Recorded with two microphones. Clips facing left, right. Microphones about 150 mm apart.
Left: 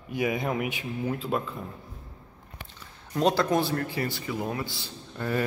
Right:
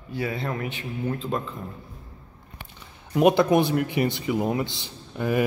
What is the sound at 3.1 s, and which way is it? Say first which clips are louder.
Speech: right 5 dB; 15° right (ahead or behind).